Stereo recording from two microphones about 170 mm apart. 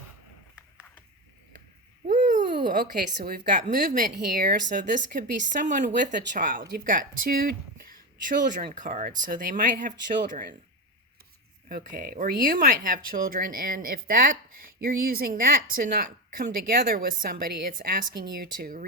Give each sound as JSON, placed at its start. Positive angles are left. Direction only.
{"t": 2.0, "sound": "a sound", "side_deg": -50}
{"t": 2.7, "sound": "a woman's voice", "side_deg": -60}
{"t": 10.2, "sound": "speech", "side_deg": -55}
{"t": 11.7, "sound": "a woman's voice", "side_deg": -55}